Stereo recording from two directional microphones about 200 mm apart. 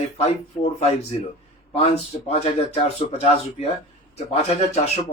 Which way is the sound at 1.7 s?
30° left (ahead or behind).